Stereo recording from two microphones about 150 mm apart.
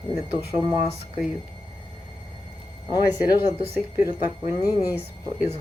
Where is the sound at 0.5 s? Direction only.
15° right (ahead or behind).